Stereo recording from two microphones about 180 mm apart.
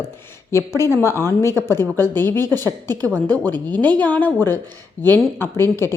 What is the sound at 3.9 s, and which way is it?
A woman's voice, 10° left (ahead or behind).